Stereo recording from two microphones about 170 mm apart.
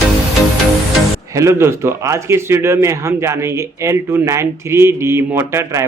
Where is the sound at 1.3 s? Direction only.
15° right (ahead or behind).